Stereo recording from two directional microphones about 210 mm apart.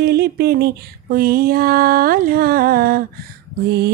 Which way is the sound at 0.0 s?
50° right (ahead or behind).